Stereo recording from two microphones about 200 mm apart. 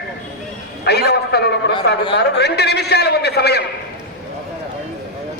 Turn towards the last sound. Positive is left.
turn(degrees=55)  # may be behind; listen again after turning